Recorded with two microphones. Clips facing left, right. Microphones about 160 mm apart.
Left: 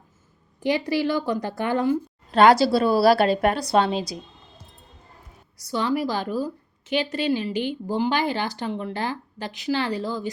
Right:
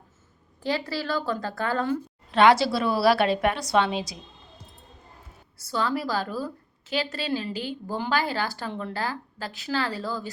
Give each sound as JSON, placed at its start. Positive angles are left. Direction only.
{"t": 0.6, "sound": "a woman's voice", "side_deg": 15}
{"t": 2.3, "sound": "a woman's voice", "side_deg": 40}
{"t": 5.5, "sound": "a woman's voice", "side_deg": 15}